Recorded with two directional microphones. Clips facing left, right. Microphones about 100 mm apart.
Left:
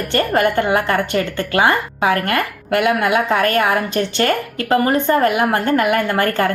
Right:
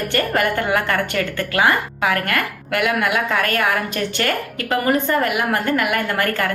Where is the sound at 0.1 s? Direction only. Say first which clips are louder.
Left 5 dB; 25° left (ahead or behind).